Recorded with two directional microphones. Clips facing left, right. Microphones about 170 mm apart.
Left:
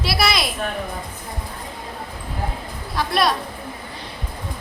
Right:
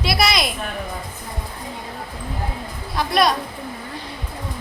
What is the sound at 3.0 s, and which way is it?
Speech, centre (ahead or behind).